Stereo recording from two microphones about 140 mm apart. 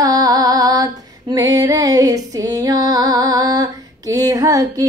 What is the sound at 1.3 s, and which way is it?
Female singing, 25° right (ahead or behind).